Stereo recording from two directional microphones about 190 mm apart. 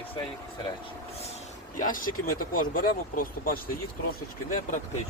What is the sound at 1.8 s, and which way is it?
Speech, 45° left (ahead or behind).